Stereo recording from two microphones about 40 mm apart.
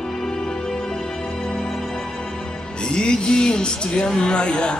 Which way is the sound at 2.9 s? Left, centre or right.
Left.